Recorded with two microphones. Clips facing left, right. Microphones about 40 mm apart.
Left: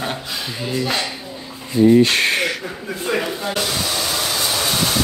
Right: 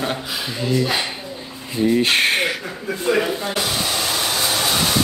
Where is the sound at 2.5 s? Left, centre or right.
Centre.